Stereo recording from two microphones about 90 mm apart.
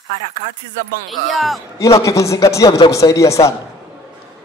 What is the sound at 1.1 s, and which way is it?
Speech, centre (ahead or behind).